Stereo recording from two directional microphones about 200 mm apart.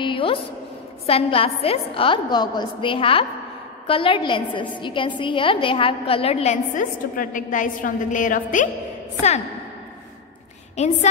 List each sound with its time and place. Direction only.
0.0 s a sound: 25° left (ahead or behind)
1.0 s a woman's voice: 30° left (ahead or behind)
10.8 s a woman's voice: 35° left (ahead or behind)